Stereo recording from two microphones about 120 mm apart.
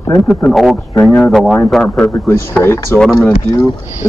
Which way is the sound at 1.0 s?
5° left (ahead or behind).